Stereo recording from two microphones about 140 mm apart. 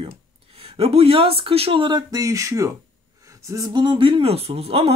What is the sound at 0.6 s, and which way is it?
Speech, 45° right (ahead or behind).